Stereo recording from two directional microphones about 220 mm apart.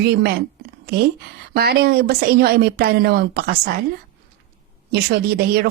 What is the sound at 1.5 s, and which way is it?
Speech, 45° right (ahead or behind).